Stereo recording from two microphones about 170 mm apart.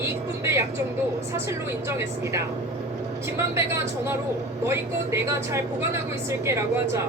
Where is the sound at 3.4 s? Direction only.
15° right (ahead or behind).